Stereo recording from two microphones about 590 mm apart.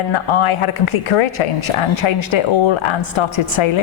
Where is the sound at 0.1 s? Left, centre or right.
Left.